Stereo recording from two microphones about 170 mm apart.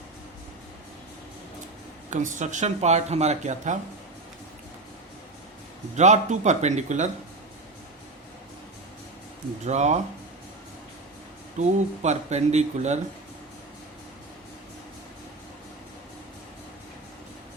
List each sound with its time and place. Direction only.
2.0 s speech: 45° right (ahead or behind)
6.0 s speech: 45° right (ahead or behind)
9.6 s speech: 45° right (ahead or behind)
11.6 s speech: 40° right (ahead or behind)